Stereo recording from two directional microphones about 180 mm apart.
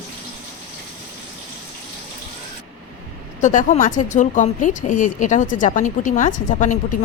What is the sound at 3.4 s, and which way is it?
Speech, 45° left (ahead or behind).